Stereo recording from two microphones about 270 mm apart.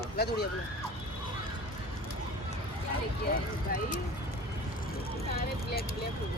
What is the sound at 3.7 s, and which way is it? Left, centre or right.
Speech, left.